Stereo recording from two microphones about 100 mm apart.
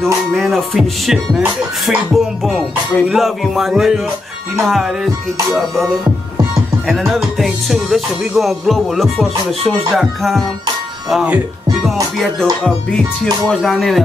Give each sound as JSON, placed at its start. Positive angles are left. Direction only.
{"t": 0.0, "sound": "music", "side_deg": 0}
{"t": 6.9, "sound": "music", "side_deg": 0}
{"t": 11.8, "sound": "music", "side_deg": 0}